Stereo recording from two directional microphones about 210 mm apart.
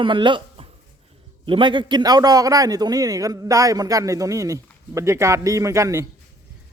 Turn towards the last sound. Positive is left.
turn(degrees=-15)  # may be behind; listen again after turning